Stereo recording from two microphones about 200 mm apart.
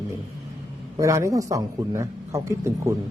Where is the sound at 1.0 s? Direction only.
15° right (ahead or behind).